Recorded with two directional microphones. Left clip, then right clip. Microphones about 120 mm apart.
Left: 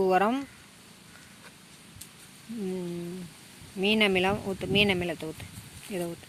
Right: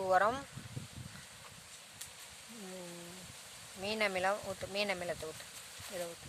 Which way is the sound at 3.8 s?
15° left (ahead or behind).